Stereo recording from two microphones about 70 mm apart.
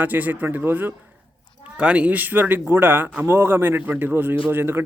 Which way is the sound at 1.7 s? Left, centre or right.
Centre.